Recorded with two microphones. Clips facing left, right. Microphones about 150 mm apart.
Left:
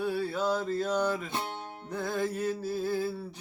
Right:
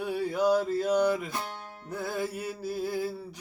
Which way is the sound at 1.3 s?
25° left (ahead or behind).